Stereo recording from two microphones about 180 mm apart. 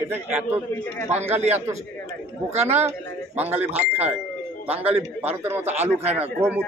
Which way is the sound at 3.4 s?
10° right (ahead or behind).